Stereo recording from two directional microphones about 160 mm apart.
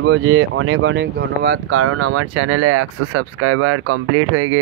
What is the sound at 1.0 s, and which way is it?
Speech, 90° right.